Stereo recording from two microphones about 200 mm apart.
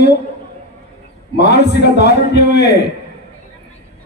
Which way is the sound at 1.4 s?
55° left (ahead or behind).